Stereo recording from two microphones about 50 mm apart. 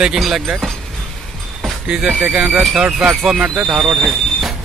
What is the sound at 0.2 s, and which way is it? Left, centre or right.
Speech, centre.